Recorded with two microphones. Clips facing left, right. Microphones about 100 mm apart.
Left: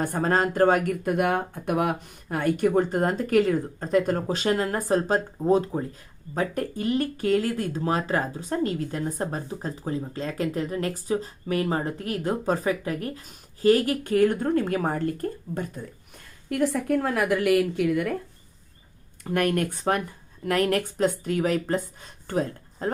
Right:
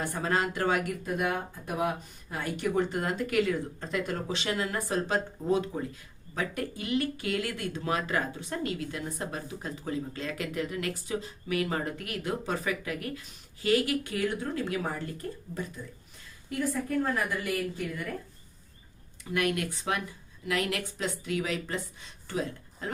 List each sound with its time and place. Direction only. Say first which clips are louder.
0.0 s speech: left 6 dB; 45° left (ahead or behind)
1.0 s speech: left 7 dB; 60° left (ahead or behind)
16.5 s a woman's voice: left 7 dB; 75° left (ahead or behind)
19.2 s speech: left 5 dB; 45° left (ahead or behind)